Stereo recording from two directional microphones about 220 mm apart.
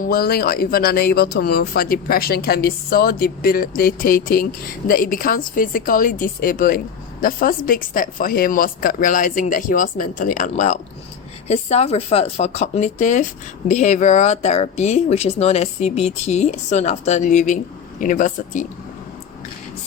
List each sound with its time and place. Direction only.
0.0 s speech: 40° left (ahead or behind)